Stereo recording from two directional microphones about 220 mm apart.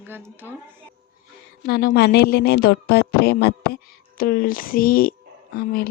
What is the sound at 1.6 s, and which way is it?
Speech, 45° left (ahead or behind).